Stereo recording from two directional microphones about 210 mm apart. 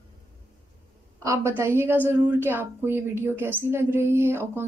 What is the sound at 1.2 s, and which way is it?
A woman's voice, 15° right (ahead or behind).